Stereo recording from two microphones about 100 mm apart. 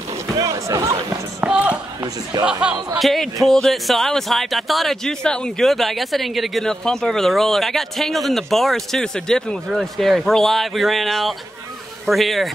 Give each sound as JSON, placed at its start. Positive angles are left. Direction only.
{"t": 0.4, "sound": "speech", "side_deg": -35}
{"t": 1.4, "sound": "run", "side_deg": -15}
{"t": 2.6, "sound": "speech", "side_deg": -10}
{"t": 3.0, "sound": "speech", "side_deg": 0}